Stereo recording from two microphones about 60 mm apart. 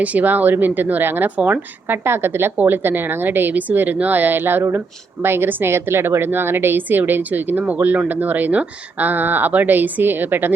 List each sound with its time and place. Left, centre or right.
0.0 s speech: right